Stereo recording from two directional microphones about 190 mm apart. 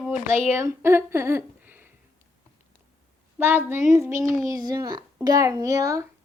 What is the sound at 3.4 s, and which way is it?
A child's voice, 10° right (ahead or behind).